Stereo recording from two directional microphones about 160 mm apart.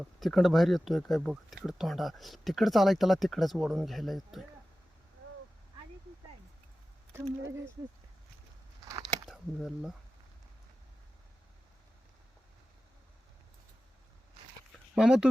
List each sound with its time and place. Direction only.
0.0 s speech: centre (ahead or behind)
7.1 s speech: 15° right (ahead or behind)
9.3 s speech: centre (ahead or behind)
14.9 s speech: 5° right (ahead or behind)